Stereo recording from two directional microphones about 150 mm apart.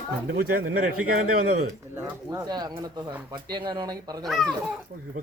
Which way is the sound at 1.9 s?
20° right (ahead or behind).